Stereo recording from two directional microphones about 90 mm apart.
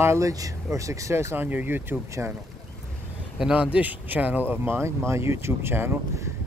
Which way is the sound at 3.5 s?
15° right (ahead or behind).